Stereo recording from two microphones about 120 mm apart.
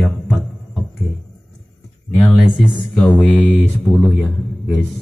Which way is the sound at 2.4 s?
5° right (ahead or behind).